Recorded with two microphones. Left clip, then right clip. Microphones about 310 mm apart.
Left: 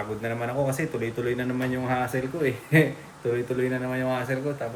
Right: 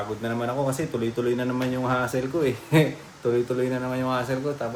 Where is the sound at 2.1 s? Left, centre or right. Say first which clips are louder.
Right 2 dB; centre.